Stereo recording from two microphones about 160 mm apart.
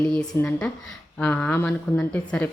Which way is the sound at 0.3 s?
15° left (ahead or behind).